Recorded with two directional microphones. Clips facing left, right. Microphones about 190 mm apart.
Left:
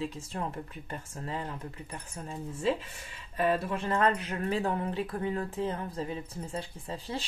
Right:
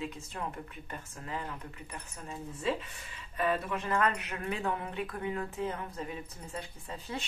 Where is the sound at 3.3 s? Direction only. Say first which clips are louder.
Left 3 dB; 30° left (ahead or behind).